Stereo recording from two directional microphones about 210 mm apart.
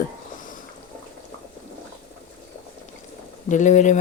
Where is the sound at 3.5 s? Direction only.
35° left (ahead or behind).